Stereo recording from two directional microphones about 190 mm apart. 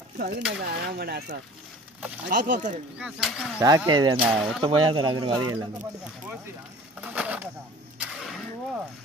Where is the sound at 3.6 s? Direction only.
15° right (ahead or behind).